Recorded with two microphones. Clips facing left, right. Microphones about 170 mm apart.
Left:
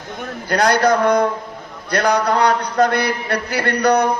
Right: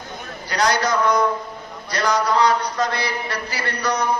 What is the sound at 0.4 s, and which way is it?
A man's voice, 55° left (ahead or behind).